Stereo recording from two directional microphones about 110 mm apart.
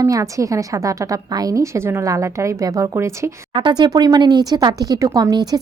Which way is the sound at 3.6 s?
45° right (ahead or behind).